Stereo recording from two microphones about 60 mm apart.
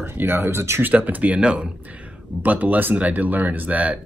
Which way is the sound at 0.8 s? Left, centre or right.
Right.